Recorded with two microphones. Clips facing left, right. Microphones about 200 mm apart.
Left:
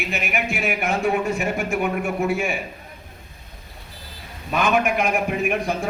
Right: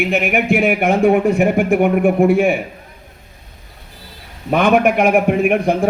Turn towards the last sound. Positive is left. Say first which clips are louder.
# right 8 dB
turn(degrees=-60)  # may be behind; listen again after turning